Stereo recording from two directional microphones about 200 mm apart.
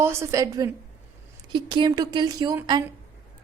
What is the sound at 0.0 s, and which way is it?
A woman's voice, 15° right (ahead or behind).